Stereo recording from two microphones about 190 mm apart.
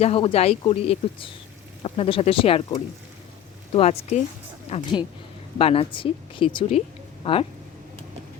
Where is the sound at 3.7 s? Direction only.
30° left (ahead or behind).